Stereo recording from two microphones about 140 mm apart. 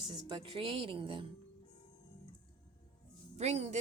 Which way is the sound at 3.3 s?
50° right (ahead or behind).